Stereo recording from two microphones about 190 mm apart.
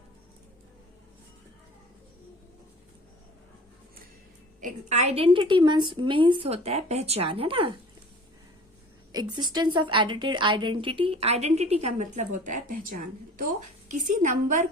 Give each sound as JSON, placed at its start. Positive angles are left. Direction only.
{"t": 4.6, "sound": "a woman's voice", "side_deg": -35}
{"t": 9.1, "sound": "a woman's voice", "side_deg": -20}